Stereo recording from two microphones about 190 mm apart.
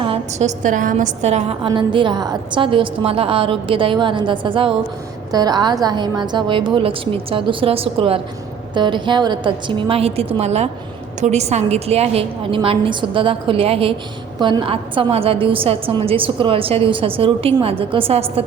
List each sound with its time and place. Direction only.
0.0 s a woman's voice: 35° right (ahead or behind)